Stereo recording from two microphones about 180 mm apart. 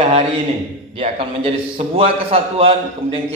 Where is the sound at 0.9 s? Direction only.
30° right (ahead or behind).